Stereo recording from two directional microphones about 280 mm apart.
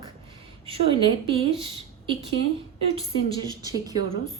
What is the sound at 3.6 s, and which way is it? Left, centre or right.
Speech, centre.